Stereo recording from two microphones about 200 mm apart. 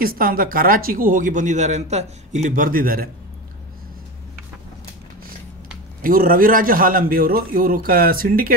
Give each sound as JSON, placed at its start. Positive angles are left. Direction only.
{"t": 0.0, "sound": "speech", "side_deg": -45}
{"t": 6.0, "sound": "speech", "side_deg": -45}